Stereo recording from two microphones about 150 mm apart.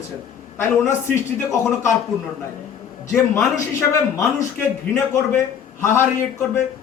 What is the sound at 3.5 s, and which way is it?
A man's voice, 20° left (ahead or behind).